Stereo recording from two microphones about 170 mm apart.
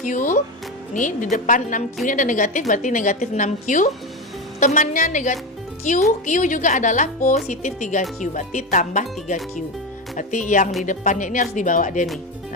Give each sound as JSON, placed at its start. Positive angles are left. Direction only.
{"t": 0.0, "sound": "a woman's voice", "side_deg": 50}